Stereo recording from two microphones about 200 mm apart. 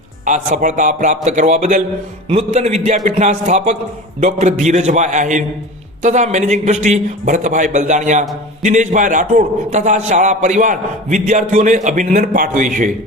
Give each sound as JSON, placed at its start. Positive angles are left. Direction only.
{"t": 0.3, "sound": "a man's voice", "side_deg": -35}